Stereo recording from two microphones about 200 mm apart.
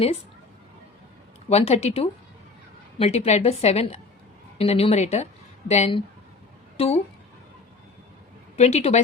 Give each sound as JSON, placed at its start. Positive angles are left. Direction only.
{"t": 1.5, "sound": "a woman's voice", "side_deg": 30}
{"t": 8.5, "sound": "a woman's voice", "side_deg": 30}